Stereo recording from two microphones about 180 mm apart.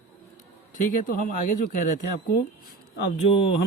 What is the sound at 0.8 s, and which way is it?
A man's voice, 45° left (ahead or behind).